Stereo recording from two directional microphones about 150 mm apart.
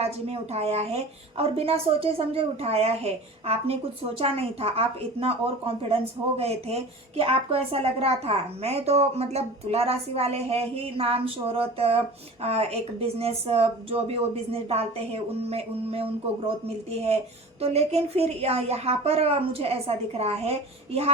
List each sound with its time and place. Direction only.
0.0 s a woman's voice: 45° right (ahead or behind)